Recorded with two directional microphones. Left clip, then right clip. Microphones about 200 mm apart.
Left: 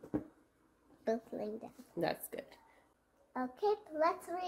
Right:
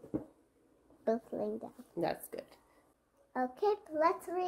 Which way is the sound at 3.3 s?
50° right (ahead or behind).